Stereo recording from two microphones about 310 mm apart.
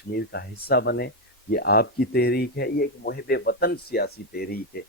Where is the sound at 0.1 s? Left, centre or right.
Left.